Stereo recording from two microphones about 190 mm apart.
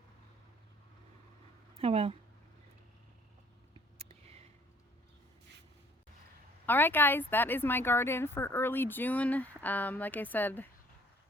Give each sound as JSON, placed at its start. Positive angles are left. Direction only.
{"t": 1.7, "sound": "speech", "side_deg": -30}
{"t": 3.9, "sound": "a sound", "side_deg": -30}
{"t": 6.7, "sound": "speech", "side_deg": 10}